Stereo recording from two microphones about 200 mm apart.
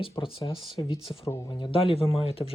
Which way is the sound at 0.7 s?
25° left (ahead or behind).